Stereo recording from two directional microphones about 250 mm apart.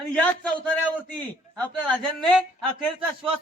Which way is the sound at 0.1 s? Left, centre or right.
Centre.